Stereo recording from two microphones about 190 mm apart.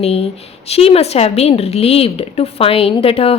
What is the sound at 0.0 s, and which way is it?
A woman's voice, 30° left (ahead or behind).